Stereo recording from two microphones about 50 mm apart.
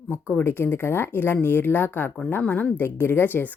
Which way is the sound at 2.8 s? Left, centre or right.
Left.